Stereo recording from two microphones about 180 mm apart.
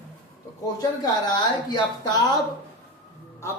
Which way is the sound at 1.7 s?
25° left (ahead or behind).